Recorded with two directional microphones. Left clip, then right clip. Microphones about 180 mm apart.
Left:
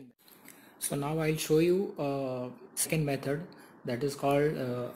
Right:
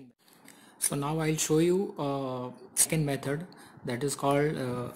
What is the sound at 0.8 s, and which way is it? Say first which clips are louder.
Speech: right 1 dB; 15° right (ahead or behind).